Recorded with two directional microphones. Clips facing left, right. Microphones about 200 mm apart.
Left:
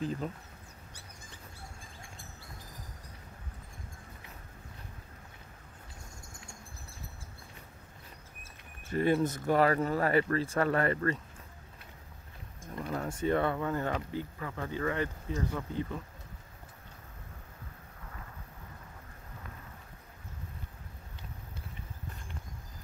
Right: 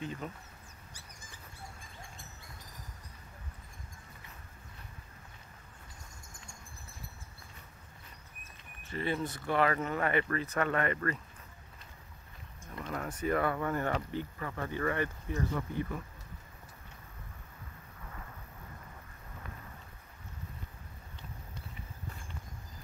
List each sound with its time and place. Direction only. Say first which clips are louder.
0.0 s speech: left 5 dB; 35° left (ahead or behind)
8.8 s speech: left 7 dB; 45° left (ahead or behind); by 11.1 s 30° left (ahead or behind)
12.9 s speech: left 2 dB; 25° left (ahead or behind)
13.6 s speech: even; 15° left (ahead or behind)